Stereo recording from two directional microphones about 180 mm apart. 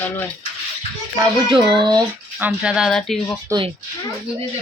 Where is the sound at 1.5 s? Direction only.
25° right (ahead or behind).